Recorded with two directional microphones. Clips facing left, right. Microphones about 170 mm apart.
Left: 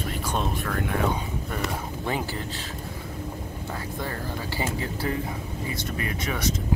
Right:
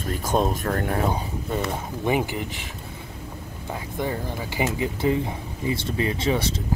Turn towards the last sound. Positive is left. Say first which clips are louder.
# right 5 dB
turn(degrees=-25)  # may be behind; listen again after turning